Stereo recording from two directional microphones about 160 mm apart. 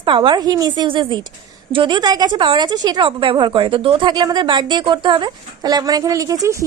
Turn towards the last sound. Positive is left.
turn(degrees=-20)  # may be behind; listen again after turning